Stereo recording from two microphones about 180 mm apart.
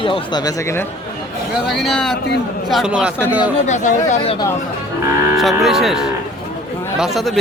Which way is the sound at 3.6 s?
40° left (ahead or behind).